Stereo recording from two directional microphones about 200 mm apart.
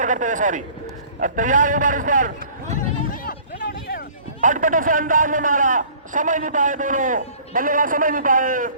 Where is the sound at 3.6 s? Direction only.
50° left (ahead or behind).